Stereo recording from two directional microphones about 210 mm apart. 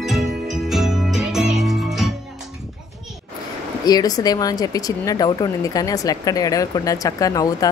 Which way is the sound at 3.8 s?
20° left (ahead or behind).